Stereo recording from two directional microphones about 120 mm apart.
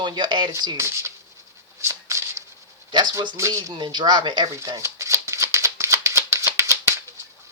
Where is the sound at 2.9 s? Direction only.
40° right (ahead or behind).